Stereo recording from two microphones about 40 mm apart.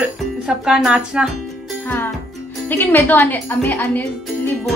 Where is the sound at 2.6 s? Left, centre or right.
Left.